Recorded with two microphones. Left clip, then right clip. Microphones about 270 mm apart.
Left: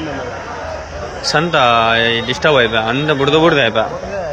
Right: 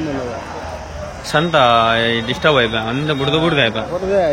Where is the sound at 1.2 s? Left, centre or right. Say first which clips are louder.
Left 1 dB; centre.